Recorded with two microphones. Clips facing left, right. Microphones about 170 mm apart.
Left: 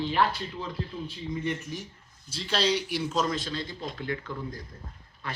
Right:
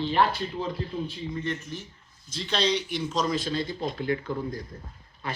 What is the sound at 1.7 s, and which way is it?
A man's voice, 10° left (ahead or behind).